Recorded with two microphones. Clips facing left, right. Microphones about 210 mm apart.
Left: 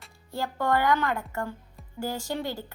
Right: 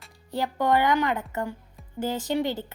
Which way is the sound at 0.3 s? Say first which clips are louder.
Right 3 dB; 20° right (ahead or behind).